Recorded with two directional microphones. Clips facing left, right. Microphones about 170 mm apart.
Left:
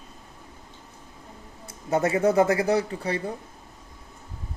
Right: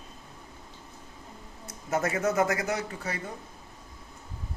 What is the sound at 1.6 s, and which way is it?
Speech, 25° left (ahead or behind).